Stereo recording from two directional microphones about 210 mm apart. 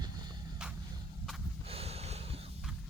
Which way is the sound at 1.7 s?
30° right (ahead or behind).